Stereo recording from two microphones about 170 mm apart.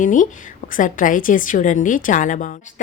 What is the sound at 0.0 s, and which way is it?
A woman's voice, 50° left (ahead or behind).